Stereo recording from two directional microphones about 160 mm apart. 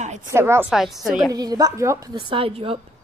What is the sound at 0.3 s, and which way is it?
Speech, 15° right (ahead or behind).